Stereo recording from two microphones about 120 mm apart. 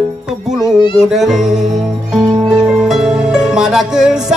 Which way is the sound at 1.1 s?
5° right (ahead or behind).